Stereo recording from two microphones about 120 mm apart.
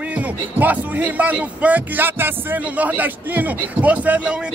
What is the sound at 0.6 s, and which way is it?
Speech, 15° right (ahead or behind).